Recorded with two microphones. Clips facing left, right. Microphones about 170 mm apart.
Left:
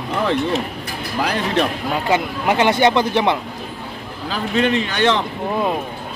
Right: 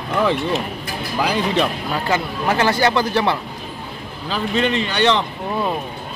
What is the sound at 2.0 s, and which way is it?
Speech, 15° left (ahead or behind).